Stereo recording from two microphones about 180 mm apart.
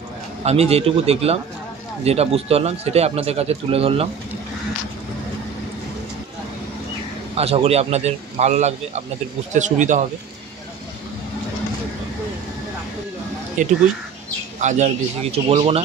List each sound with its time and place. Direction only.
0.4 s speech: 35° right (ahead or behind)
7.3 s speech: 35° right (ahead or behind)
13.6 s speech: 45° right (ahead or behind)